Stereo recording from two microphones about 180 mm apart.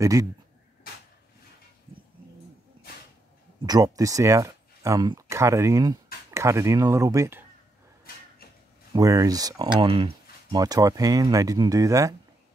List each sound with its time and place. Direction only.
0.0 s speech: 20° right (ahead or behind)
3.6 s speech: 20° right (ahead or behind)
8.9 s speech: 20° right (ahead or behind)